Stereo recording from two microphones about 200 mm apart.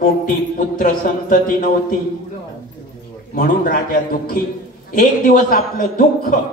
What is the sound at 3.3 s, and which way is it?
Speech, 45° left (ahead or behind).